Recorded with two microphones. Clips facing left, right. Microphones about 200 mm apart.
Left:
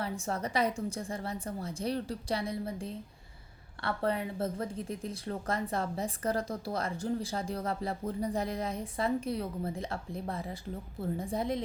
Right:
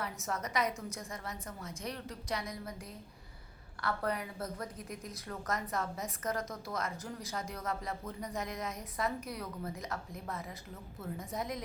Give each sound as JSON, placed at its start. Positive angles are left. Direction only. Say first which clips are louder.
{"t": 0.0, "sound": "a woman's voice", "louder": "left 4 dB", "side_deg": 30}